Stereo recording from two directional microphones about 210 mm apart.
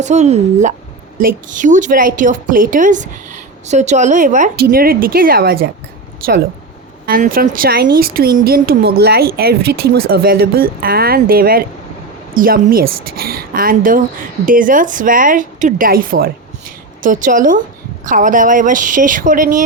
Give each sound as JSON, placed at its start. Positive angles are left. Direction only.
{"t": 0.0, "sound": "a woman's voice", "side_deg": -35}
{"t": 7.0, "sound": "a woman's voice", "side_deg": -45}